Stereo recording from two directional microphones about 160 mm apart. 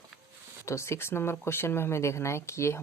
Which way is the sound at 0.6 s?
15° left (ahead or behind).